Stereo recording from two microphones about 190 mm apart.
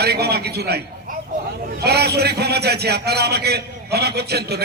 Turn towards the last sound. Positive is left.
turn(degrees=-60)  # may be behind; listen again after turning